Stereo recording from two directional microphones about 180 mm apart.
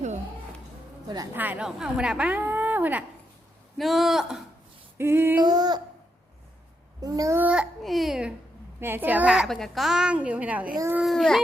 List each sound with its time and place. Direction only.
1.0 s child singing: 20° right (ahead or behind)
1.4 s a woman's voice: 10° right (ahead or behind)
4.9 s a woman's voice: 10° right (ahead or behind)
5.4 s child singing: 20° right (ahead or behind)
7.0 s a child's voice: 20° right (ahead or behind)
11.0 s a child's voice: centre (ahead or behind)